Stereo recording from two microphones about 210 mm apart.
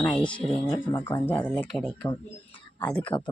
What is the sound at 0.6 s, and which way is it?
Speech, 15° left (ahead or behind).